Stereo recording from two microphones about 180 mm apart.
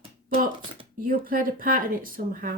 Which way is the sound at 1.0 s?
50° right (ahead or behind).